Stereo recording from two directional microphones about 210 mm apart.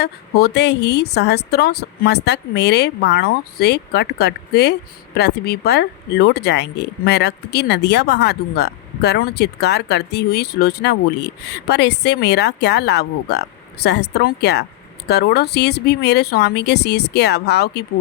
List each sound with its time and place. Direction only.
0.0 s speech: 50° left (ahead or behind)